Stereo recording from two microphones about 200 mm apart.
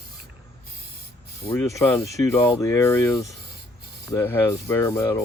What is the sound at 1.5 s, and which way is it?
Speech, 10° left (ahead or behind).